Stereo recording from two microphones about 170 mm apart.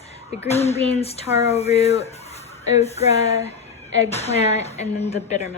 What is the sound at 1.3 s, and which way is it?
Speech, 20° right (ahead or behind).